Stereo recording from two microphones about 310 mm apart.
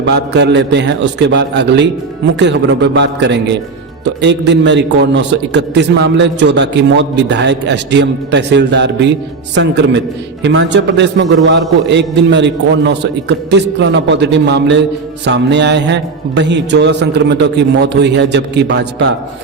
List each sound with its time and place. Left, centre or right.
0.0 s a man's voice: right